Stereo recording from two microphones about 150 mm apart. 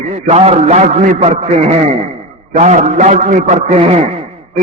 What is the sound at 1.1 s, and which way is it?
Speech, 55° right (ahead or behind).